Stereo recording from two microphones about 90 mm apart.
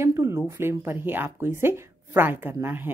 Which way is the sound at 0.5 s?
25° right (ahead or behind).